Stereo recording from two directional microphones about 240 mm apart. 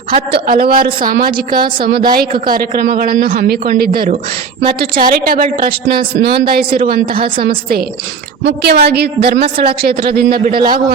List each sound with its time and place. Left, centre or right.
0.1 s a man's voice: right